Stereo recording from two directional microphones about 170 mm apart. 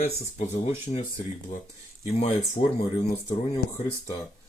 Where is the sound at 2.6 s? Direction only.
55° left (ahead or behind).